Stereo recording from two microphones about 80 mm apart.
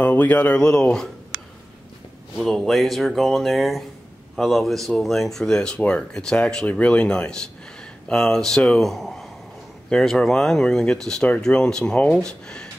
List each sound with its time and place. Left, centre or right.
0.0 s speech: left
2.3 s speech: centre